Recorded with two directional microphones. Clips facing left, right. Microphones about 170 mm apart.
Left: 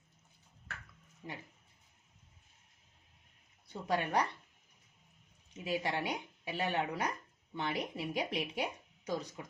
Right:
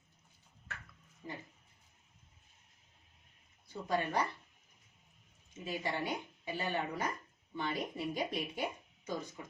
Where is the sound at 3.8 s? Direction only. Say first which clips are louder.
Left 1 dB; 70° left (ahead or behind).